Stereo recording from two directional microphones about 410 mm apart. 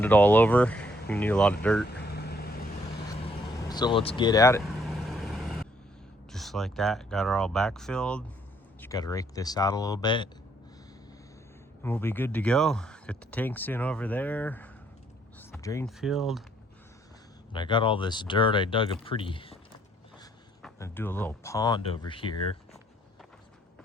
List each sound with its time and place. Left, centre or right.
0.0 s speech: centre
2.0 s vehicle: left
3.1 s vehicle: centre
6.3 s speech: centre
11.8 s speech: centre
17.5 s speech: centre
20.6 s speech: centre